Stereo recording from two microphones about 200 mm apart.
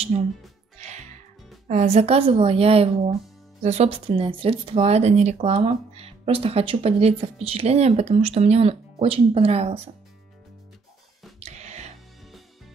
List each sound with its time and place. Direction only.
0.1 s speech: 30° right (ahead or behind)
0.7 s music: 35° right (ahead or behind)
1.7 s speech: 35° right (ahead or behind)
11.3 s music: 35° right (ahead or behind)